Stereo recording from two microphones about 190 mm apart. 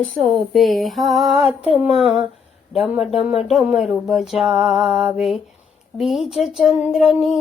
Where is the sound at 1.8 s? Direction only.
Centre (ahead or behind).